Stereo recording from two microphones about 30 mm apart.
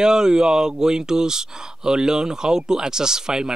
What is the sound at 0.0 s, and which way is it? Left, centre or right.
Speech, right.